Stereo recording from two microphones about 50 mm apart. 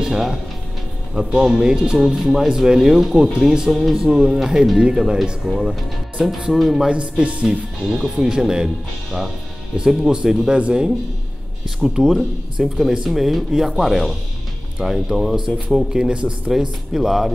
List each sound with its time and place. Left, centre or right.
0.0 s speech: centre
6.9 s speech: right
8.0 s speech: centre
8.3 s speech: centre
9.8 s speech: centre
10.4 s speech: centre
11.8 s speech: centre
16.5 s speech: centre